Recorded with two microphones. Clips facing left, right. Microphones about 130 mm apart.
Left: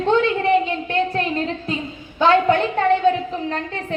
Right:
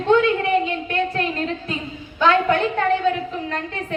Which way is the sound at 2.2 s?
30° left (ahead or behind).